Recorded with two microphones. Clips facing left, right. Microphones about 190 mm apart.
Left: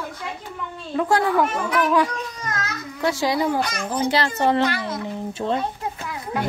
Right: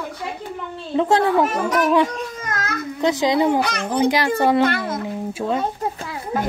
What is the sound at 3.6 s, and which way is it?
Speech, 65° right (ahead or behind).